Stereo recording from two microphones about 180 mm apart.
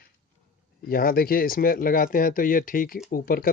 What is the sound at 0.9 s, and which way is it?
Speech, 55° left (ahead or behind).